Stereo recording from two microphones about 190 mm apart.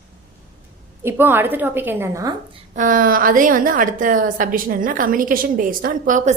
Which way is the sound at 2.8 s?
45° right (ahead or behind).